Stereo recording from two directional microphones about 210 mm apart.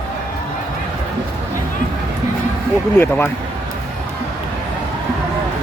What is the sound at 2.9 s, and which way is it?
Speech, 10° left (ahead or behind).